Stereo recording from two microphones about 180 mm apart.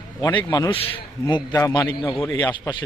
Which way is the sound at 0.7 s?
30° left (ahead or behind).